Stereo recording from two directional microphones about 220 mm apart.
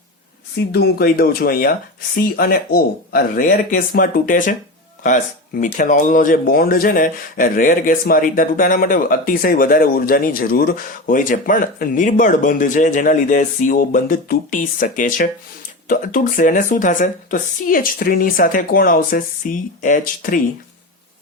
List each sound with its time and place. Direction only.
0.7 s speech: 45° left (ahead or behind)